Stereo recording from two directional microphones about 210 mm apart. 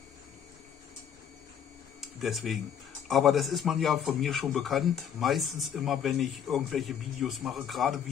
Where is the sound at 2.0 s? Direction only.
Centre (ahead or behind).